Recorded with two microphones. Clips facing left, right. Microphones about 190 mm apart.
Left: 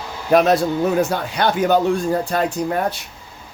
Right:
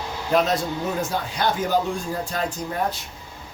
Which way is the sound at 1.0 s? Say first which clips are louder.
Left 6 dB; 65° left (ahead or behind).